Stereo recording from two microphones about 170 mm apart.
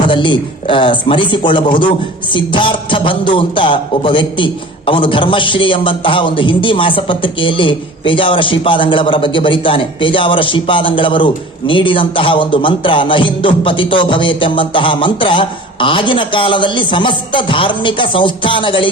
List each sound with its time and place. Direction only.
0.1 s a man's voice: 30° left (ahead or behind)